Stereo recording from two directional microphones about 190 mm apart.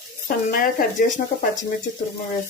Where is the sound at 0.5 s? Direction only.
45° left (ahead or behind).